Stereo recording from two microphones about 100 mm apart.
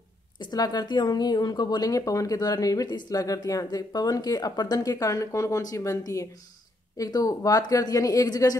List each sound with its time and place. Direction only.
0.4 s speech: 40° left (ahead or behind)